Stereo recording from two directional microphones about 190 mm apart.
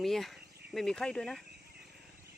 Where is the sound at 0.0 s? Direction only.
Centre (ahead or behind).